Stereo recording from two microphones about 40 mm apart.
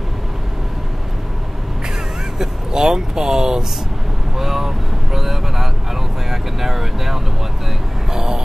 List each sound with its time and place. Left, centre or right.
2.3 s speech: centre
4.4 s vehicle: centre
6.3 s speech: centre
8.1 s vehicle: centre